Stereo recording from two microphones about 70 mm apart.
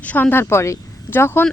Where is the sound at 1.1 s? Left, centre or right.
Left.